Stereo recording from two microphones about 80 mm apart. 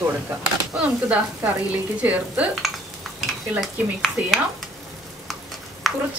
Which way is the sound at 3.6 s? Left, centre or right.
Centre.